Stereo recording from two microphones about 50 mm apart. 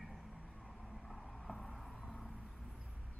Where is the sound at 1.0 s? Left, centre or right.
Centre.